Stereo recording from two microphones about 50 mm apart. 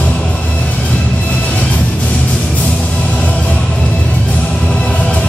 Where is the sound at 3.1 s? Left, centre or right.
Left.